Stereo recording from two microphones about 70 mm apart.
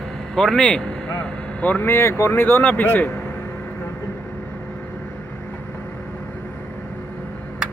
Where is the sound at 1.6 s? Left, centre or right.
Left.